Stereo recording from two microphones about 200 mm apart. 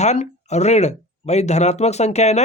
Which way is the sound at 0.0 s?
35° left (ahead or behind).